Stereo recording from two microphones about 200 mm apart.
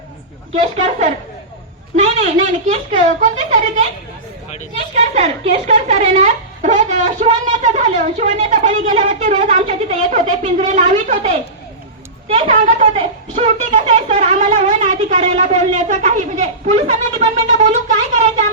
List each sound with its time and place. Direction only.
2.0 s speech: 35° right (ahead or behind)
4.9 s speech: 30° right (ahead or behind)
12.3 s speech: 25° right (ahead or behind)